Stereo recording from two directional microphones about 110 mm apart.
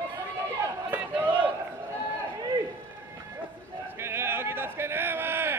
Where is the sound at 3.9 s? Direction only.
20° right (ahead or behind).